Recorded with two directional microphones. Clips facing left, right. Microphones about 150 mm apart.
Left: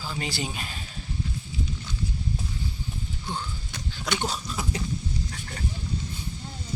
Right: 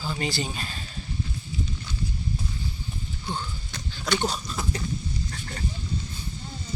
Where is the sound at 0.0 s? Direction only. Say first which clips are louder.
Right 2 dB; 5° left (ahead or behind).